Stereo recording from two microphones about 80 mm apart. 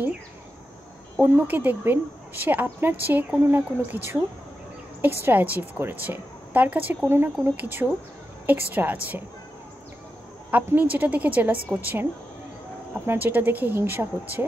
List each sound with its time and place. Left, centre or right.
1.1 s speech: right
10.5 s speech: right